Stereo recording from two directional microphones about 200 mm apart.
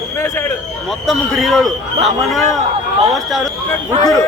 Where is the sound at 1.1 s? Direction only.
Centre (ahead or behind).